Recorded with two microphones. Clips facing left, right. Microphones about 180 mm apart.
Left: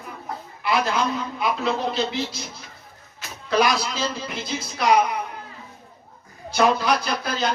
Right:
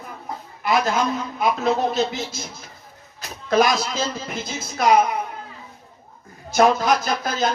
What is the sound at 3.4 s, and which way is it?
Speech, 45° right (ahead or behind).